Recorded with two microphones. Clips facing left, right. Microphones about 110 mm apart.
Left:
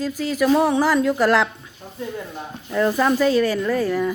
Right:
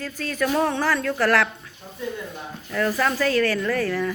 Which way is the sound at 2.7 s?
20° left (ahead or behind).